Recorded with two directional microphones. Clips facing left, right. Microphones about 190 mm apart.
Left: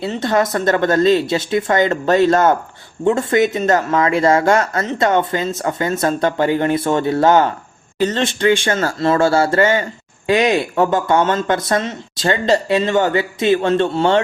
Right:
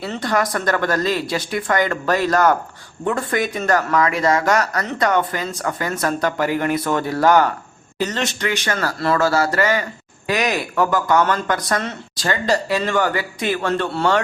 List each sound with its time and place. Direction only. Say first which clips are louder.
0.0 s speech: left 4 dB; 25° left (ahead or behind)